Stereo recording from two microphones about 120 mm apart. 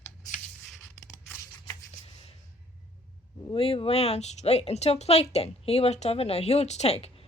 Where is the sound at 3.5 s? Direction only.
50° left (ahead or behind).